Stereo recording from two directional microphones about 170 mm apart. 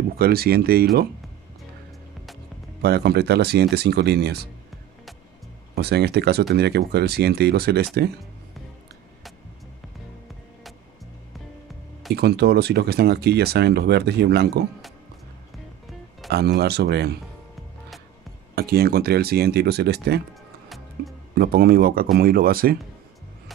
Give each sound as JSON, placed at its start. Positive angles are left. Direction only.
{"t": 0.2, "sound": "speech", "side_deg": -65}
{"t": 2.8, "sound": "speech", "side_deg": -75}
{"t": 5.8, "sound": "speech", "side_deg": -70}
{"t": 12.1, "sound": "speech", "side_deg": -70}
{"t": 16.3, "sound": "speech", "side_deg": -70}
{"t": 18.5, "sound": "speech", "side_deg": -65}
{"t": 20.6, "sound": "music", "side_deg": 0}
{"t": 21.4, "sound": "speech", "side_deg": -65}